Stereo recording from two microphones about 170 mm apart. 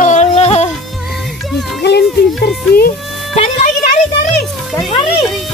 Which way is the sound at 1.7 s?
80° left.